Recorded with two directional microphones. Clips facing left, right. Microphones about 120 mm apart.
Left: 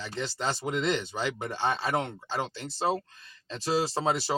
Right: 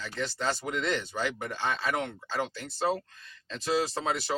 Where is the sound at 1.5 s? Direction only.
35° left (ahead or behind).